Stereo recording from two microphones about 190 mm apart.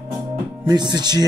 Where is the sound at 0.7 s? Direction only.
20° right (ahead or behind).